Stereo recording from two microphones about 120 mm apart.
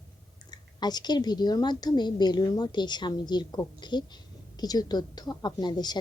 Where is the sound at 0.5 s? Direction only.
35° left (ahead or behind).